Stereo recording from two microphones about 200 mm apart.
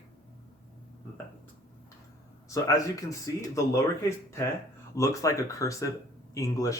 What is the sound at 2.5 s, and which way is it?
Speech, 15° left (ahead or behind).